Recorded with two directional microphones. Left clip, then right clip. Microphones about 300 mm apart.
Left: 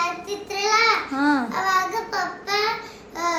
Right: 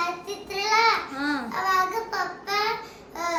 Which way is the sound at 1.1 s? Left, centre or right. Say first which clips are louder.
Left 7 dB; centre.